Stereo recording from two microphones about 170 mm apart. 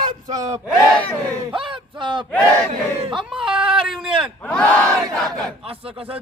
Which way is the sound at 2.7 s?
35° right (ahead or behind).